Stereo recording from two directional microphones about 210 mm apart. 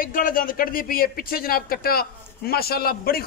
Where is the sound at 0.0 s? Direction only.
40° left (ahead or behind).